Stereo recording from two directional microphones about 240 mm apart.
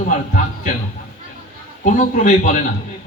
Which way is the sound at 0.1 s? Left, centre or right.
Left.